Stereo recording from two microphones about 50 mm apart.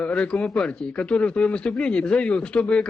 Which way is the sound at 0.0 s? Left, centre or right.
Left.